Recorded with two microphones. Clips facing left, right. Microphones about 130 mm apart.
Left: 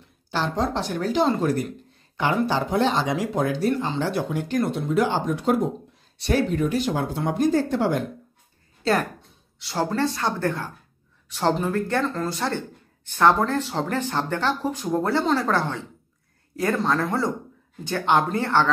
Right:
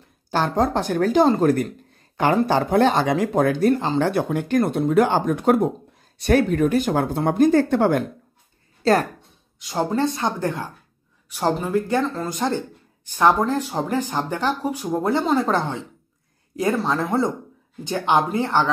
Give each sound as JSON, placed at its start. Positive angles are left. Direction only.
{"t": 0.3, "sound": "speech", "side_deg": -50}
{"t": 9.6, "sound": "speech", "side_deg": -15}